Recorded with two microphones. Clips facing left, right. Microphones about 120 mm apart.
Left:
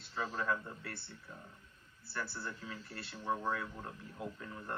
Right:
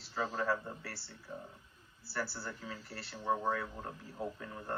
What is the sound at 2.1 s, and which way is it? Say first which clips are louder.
Speech: right 2 dB; 30° right (ahead or behind).